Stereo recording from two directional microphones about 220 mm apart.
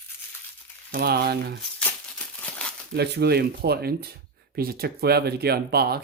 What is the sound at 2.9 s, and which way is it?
Speech, 50° right (ahead or behind).